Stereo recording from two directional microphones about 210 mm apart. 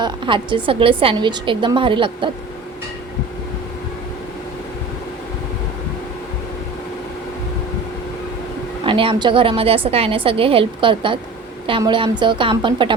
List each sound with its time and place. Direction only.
0.0 s a woman's voice: 25° right (ahead or behind)
8.8 s a woman's voice: 25° right (ahead or behind)